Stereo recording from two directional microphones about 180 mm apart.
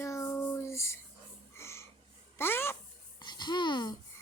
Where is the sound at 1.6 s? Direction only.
15° left (ahead or behind).